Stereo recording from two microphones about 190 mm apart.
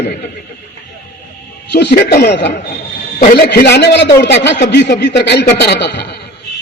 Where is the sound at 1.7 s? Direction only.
60° left (ahead or behind).